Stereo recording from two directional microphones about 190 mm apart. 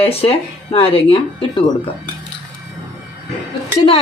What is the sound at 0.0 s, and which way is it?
A woman's voice, 30° left (ahead or behind).